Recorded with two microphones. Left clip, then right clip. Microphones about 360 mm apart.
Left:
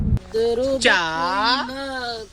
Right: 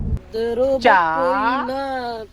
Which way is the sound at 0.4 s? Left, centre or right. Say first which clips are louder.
Right 3 dB; centre.